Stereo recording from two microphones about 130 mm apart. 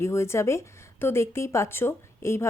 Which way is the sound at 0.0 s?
20° left (ahead or behind).